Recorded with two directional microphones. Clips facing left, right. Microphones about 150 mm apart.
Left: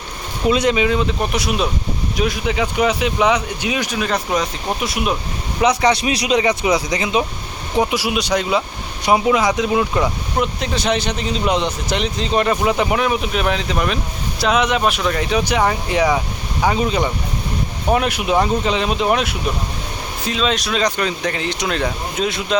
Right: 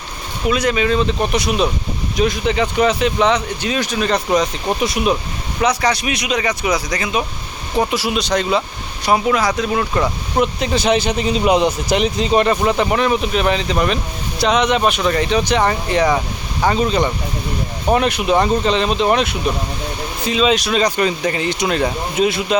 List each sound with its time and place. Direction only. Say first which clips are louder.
0.4 s speech: left 1 dB; 25° left (ahead or behind); by 5.1 s centre (ahead or behind)
5.5 s speech: left 2 dB; 20° left (ahead or behind)
7.8 s speech: even; 10° left (ahead or behind)
9.0 s speech: left 1 dB; 20° left (ahead or behind)
9.9 s speech: right 1 dB; 5° left (ahead or behind)